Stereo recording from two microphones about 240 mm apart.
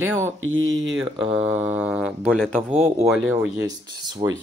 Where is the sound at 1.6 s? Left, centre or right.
Centre.